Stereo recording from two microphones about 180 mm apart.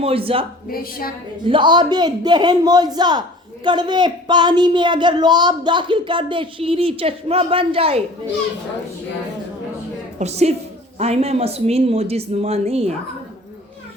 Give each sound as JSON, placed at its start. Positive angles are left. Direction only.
{"t": 0.0, "sound": "speech", "side_deg": -30}
{"t": 0.7, "sound": "a woman's voice", "side_deg": 55}
{"t": 1.5, "sound": "a man's voice", "side_deg": -25}
{"t": 10.2, "sound": "speech", "side_deg": -40}